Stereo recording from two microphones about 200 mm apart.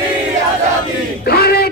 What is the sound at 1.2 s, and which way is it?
Speech, 50° left (ahead or behind).